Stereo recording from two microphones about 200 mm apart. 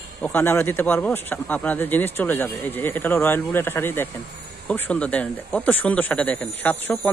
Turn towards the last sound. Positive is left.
turn(degrees=5)  # may be behind; listen again after turning